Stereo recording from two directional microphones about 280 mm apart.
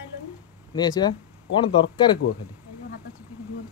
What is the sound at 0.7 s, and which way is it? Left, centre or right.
Speech, centre.